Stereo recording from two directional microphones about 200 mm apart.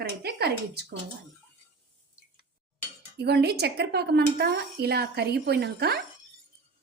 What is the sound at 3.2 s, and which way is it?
A woman's voice, 55° right (ahead or behind).